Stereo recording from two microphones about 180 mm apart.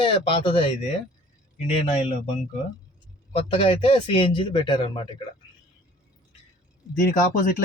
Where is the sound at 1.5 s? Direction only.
40° left (ahead or behind).